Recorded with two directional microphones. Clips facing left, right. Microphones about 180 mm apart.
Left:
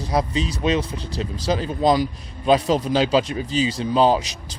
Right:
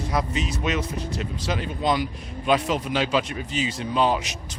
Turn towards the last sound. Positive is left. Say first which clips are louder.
# left 5 dB
turn(degrees=35)  # may be behind; listen again after turning